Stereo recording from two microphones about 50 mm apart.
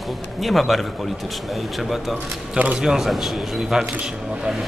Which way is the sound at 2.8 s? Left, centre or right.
Centre.